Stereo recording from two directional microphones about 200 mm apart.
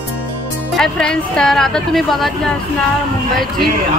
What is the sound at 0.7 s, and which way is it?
A woman's voice, 5° left (ahead or behind).